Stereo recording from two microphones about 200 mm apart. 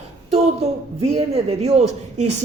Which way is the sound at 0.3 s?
30° right (ahead or behind).